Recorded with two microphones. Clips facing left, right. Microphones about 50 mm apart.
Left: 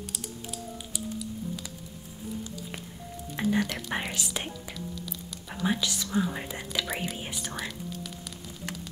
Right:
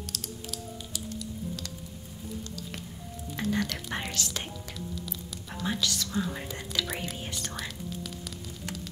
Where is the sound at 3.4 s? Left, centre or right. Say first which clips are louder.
Left 3 dB; centre.